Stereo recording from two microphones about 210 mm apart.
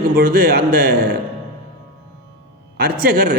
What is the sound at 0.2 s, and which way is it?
Speech, 45° right (ahead or behind).